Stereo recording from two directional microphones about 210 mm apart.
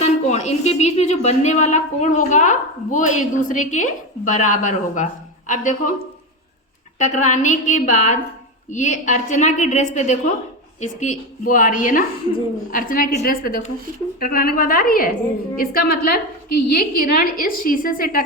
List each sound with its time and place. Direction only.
0.0 s a woman's voice: 30° left (ahead or behind)
7.0 s a woman's voice: 35° left (ahead or behind)